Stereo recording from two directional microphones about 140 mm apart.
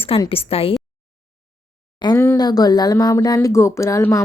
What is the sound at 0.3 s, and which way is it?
Speech, 45° left (ahead or behind).